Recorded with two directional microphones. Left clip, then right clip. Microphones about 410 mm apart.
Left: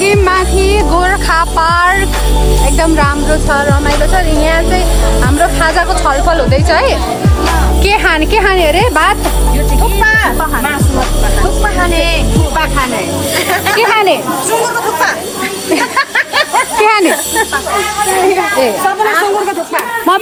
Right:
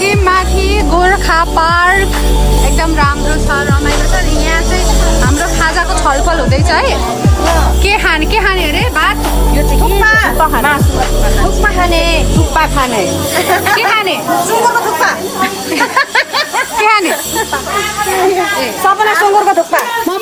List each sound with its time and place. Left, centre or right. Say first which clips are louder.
0.0 s music: left 1 dB; centre
2.8 s speech: left 2 dB; centre
5.4 s speech: left 5 dB; centre
13.7 s speech: left 2 dB; centre
15.8 s snake: right 3 dB; right
16.8 s speech: even; centre